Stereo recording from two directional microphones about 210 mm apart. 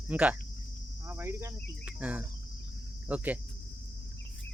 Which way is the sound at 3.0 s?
5° right (ahead or behind).